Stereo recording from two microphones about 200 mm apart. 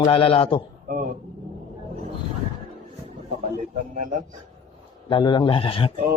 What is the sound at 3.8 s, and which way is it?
Speech, 40° right (ahead or behind).